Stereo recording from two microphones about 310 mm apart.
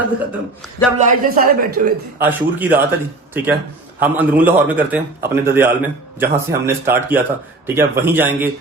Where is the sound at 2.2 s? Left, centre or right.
Centre.